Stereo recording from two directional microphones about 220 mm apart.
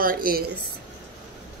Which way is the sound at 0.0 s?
40° right (ahead or behind).